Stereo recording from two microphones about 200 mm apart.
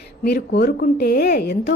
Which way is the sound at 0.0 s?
55° left (ahead or behind).